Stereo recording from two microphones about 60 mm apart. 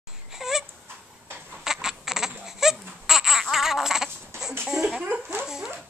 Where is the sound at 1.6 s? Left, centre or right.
Centre.